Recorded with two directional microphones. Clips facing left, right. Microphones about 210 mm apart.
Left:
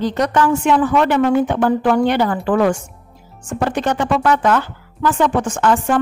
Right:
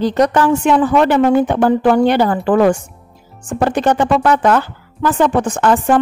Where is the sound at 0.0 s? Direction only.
35° right (ahead or behind).